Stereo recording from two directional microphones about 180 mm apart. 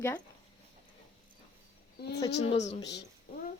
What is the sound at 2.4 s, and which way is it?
Speech, 35° left (ahead or behind).